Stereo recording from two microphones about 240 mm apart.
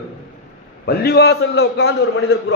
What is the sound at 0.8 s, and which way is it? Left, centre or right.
A man's voice, left.